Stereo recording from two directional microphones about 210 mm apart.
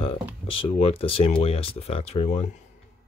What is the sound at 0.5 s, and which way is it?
Speech, 25° left (ahead or behind).